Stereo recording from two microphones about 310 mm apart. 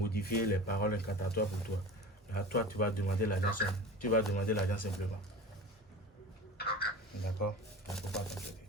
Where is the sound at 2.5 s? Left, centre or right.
Left.